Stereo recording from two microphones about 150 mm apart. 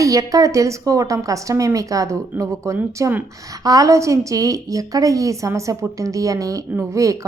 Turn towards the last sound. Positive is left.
turn(degrees=-20)  # may be behind; listen again after turning